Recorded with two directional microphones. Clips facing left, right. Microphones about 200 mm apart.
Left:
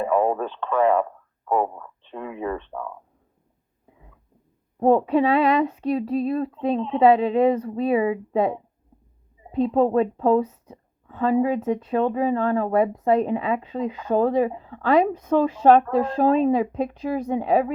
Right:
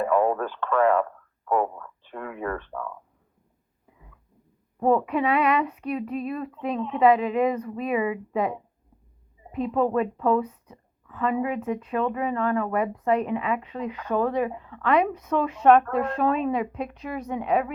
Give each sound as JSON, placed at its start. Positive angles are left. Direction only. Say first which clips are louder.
{"t": 0.0, "sound": "speech", "louder": "left 1 dB", "side_deg": 20}
{"t": 4.8, "sound": "a woman's voice", "louder": "left 4 dB", "side_deg": 30}